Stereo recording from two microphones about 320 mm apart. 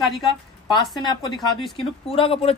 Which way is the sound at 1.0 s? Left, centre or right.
Centre.